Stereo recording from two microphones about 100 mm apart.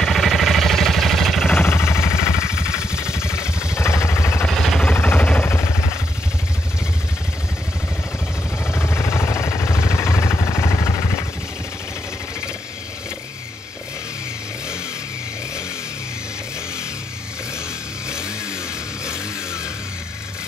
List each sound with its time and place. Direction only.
0.0 s a sound: centre (ahead or behind)
1.5 s vehicle: 25° left (ahead or behind)
4.5 s vehicle: centre (ahead or behind)
4.9 s vehicle: 20° left (ahead or behind)
8.7 s vehicle: 25° left (ahead or behind)